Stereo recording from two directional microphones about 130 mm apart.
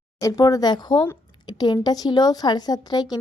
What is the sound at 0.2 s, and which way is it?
A woman's voice, 30° left (ahead or behind).